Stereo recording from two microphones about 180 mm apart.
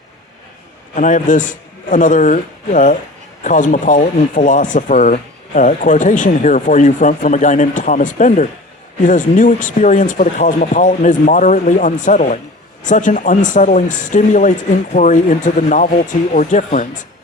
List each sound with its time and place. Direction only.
0.9 s speech: 45° left (ahead or behind)